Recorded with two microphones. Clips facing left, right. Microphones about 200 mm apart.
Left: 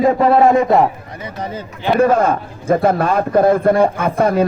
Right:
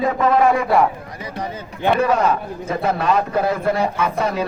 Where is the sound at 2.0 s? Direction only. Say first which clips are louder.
Left 8 dB; 50° left (ahead or behind).